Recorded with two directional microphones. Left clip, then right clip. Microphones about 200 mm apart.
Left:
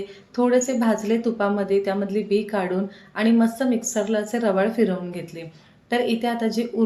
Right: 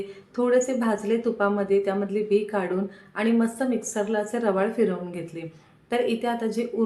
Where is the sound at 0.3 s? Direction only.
10° left (ahead or behind).